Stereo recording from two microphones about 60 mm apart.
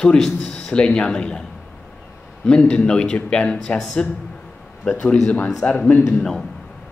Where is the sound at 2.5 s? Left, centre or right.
Centre.